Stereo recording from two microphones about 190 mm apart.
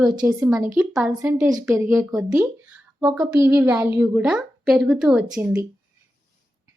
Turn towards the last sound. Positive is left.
turn(degrees=-5)  # may be behind; listen again after turning